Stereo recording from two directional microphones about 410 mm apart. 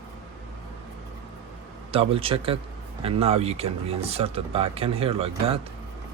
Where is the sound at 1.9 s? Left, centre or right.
Centre.